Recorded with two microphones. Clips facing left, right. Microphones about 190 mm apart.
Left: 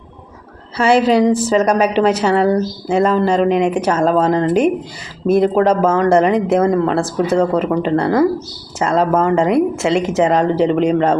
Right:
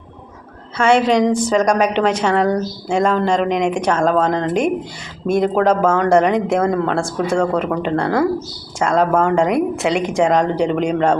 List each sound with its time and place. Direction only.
1.0 s speech: 5° left (ahead or behind)